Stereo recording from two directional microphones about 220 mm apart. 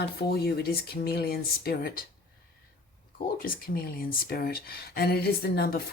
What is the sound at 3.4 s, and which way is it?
Speech, 40° left (ahead or behind).